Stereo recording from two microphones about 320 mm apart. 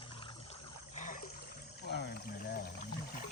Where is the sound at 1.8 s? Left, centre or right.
Left.